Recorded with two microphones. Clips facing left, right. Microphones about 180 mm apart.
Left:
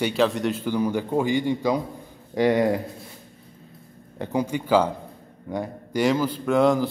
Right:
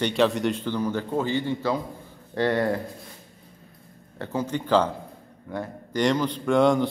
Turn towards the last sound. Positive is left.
turn(degrees=0)  # may be behind; listen again after turning